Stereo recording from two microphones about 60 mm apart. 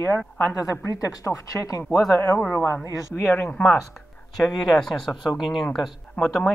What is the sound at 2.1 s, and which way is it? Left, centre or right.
Speech, left.